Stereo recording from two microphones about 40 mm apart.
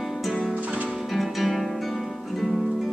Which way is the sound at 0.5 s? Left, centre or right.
Right.